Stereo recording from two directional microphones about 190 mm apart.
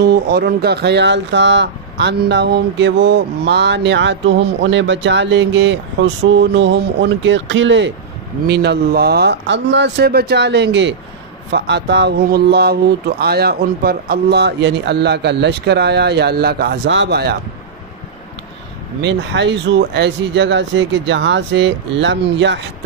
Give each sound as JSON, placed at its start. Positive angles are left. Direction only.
{"t": 0.0, "sound": "speech", "side_deg": -55}
{"t": 8.5, "sound": "speech", "side_deg": -60}
{"t": 18.9, "sound": "speech", "side_deg": -65}